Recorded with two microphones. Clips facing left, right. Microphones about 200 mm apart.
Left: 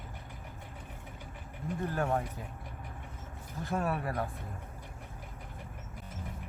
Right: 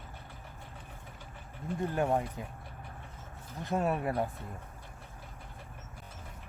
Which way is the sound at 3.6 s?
20° right (ahead or behind).